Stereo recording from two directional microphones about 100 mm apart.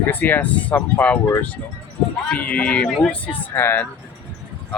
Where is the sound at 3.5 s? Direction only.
20° left (ahead or behind).